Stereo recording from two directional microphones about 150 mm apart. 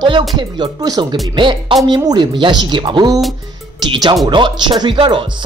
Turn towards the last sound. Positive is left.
turn(degrees=-35)  # may be behind; listen again after turning